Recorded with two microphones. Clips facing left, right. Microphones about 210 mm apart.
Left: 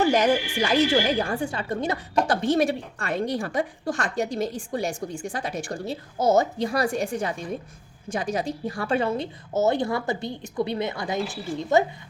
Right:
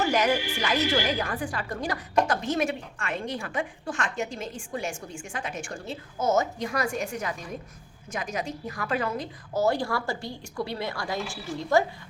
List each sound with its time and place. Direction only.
0.0 s a woman's voice: 30° left (ahead or behind)